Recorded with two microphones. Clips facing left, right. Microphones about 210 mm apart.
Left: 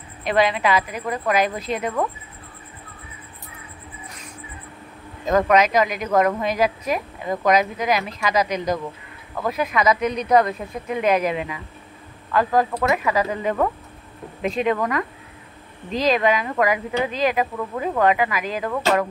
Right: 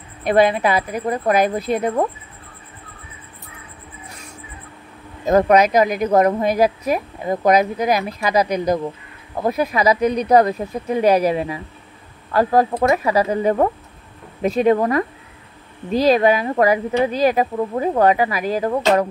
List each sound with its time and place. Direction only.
0.3 s speech: 35° right (ahead or behind)
5.3 s speech: 35° right (ahead or behind)